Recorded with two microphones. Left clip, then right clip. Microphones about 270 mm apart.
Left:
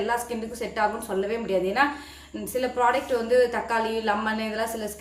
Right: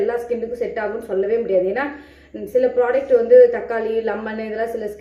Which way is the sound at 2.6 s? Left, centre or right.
Left.